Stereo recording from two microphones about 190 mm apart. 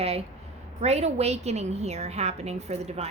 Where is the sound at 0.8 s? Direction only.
35° right (ahead or behind).